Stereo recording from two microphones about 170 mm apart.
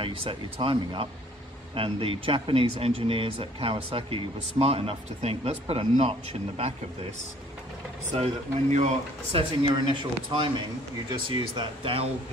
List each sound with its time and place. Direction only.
0.0 s speech: 30° right (ahead or behind)
8.1 s speech: 40° right (ahead or behind)
11.1 s speech: 25° right (ahead or behind)